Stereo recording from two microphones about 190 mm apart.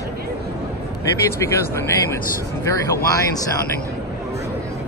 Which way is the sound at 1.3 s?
15° left (ahead or behind).